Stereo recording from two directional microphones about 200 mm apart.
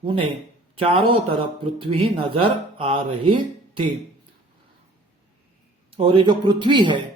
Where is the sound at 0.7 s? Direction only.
25° right (ahead or behind).